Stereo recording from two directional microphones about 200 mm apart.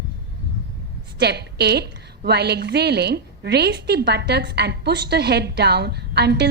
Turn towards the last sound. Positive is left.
turn(degrees=-55)  # may be behind; listen again after turning